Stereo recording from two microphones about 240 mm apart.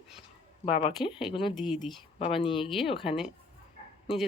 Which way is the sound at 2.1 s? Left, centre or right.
Left.